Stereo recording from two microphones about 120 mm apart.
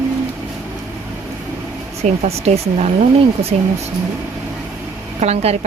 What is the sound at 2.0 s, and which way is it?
Speech, 70° right (ahead or behind).